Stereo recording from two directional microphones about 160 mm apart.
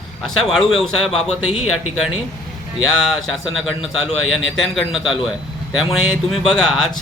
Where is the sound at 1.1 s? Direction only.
35° left (ahead or behind).